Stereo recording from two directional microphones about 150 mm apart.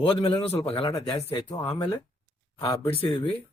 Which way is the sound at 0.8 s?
30° left (ahead or behind).